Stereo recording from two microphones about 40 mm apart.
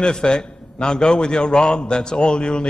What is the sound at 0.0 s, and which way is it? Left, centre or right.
A man's voice, left.